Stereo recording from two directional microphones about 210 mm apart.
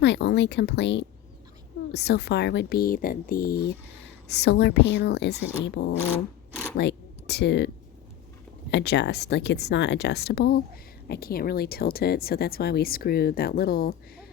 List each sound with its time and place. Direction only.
0.0 s speech: 55° left (ahead or behind)
6.7 s a sound: 55° left (ahead or behind)
8.7 s speech: 55° left (ahead or behind)